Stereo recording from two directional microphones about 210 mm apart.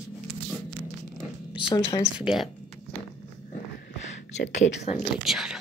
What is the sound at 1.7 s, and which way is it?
Speech, 20° left (ahead or behind).